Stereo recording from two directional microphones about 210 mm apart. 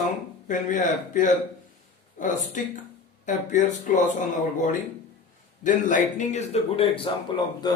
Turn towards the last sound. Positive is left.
turn(degrees=25)  # may be behind; listen again after turning